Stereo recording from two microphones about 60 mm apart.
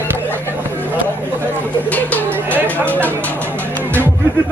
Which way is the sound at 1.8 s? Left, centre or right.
Left.